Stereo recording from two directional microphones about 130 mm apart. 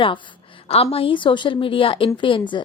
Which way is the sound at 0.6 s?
50° left (ahead or behind).